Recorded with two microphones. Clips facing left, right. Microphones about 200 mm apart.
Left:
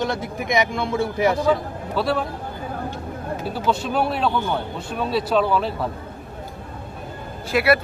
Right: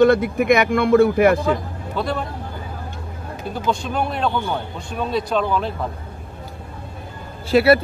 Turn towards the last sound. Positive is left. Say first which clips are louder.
# right 5 dB
turn(degrees=-30)  # may be behind; listen again after turning